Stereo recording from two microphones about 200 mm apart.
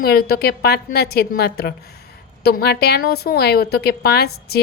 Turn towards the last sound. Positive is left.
turn(degrees=55)  # may be behind; listen again after turning